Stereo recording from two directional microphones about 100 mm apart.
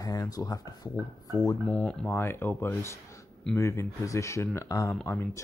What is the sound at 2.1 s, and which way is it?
Speech, 25° left (ahead or behind).